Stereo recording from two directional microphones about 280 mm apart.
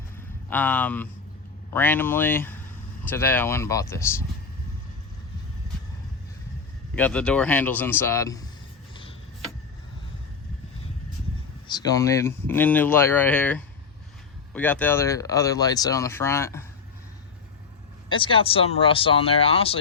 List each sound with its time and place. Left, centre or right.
0.5 s speech: centre
6.9 s speech: centre
11.7 s speech: centre
18.1 s speech: centre